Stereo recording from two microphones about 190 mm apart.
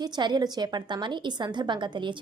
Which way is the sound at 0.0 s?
20° right (ahead or behind).